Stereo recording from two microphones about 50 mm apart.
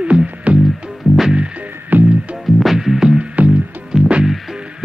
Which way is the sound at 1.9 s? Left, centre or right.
Right.